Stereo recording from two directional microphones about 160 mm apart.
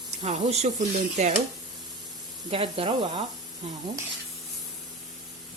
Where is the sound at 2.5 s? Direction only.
35° right (ahead or behind).